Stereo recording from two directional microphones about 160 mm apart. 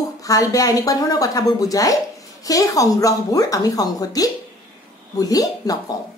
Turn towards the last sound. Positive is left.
turn(degrees=20)  # may be behind; listen again after turning